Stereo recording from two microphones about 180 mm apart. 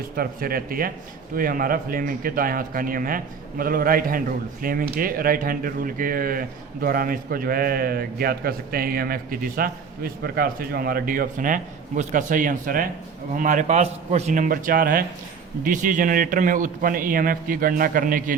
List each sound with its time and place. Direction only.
0.2 s a man's voice: 55° right (ahead or behind)